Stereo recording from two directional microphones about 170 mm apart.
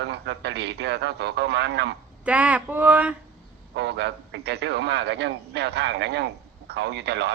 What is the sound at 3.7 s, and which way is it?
A man's voice, 90° right.